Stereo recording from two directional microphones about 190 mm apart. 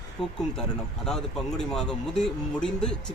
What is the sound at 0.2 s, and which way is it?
Speech, centre (ahead or behind).